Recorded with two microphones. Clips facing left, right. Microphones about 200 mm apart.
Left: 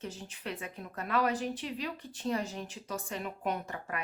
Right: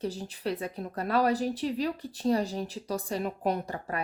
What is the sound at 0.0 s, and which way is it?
A woman's voice, 35° right (ahead or behind).